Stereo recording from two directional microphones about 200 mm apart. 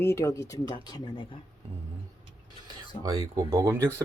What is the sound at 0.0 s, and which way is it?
Speech, 15° left (ahead or behind).